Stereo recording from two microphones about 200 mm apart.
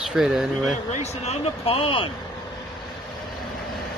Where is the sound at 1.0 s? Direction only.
30° left (ahead or behind).